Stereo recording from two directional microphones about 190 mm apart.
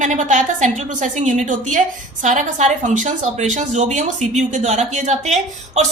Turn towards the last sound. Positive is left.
turn(degrees=-35)  # may be behind; listen again after turning